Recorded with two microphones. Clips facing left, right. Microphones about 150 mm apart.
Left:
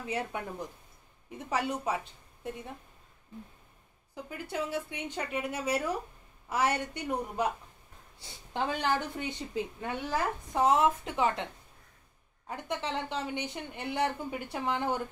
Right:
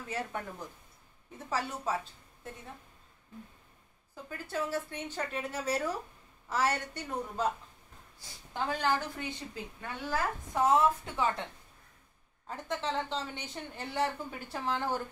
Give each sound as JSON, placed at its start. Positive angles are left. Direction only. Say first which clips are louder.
{"t": 0.0, "sound": "a woman's voice", "louder": "left 3 dB", "side_deg": 15}
{"t": 1.5, "sound": "a woman's voice", "louder": "left 3 dB", "side_deg": 15}
{"t": 4.1, "sound": "a woman's voice", "louder": "left 1 dB", "side_deg": 15}
{"t": 12.4, "sound": "a woman's voice", "louder": "even", "side_deg": 15}